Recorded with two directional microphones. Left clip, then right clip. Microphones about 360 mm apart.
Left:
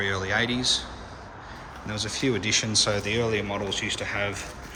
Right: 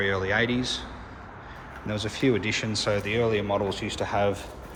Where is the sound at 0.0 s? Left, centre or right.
Centre.